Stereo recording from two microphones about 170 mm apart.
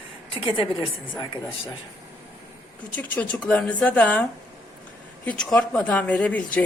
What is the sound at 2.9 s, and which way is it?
A woman's voice, 10° left (ahead or behind).